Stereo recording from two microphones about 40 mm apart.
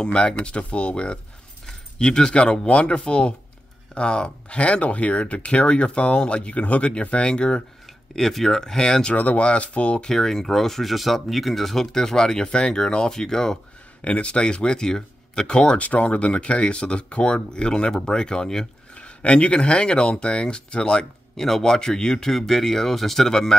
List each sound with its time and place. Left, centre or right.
0.0 s speech: left
8.2 s speech: centre
9.1 s speech: left
10.0 s speech: centre
14.0 s speech: left
15.8 s speech: left; by 18.7 s centre
18.9 s speech: left
21.4 s speech: centre
21.7 s speech: centre